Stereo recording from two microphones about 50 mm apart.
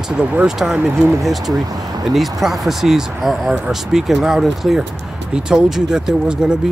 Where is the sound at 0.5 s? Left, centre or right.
Centre.